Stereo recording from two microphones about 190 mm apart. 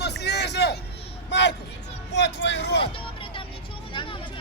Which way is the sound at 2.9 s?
30° left (ahead or behind).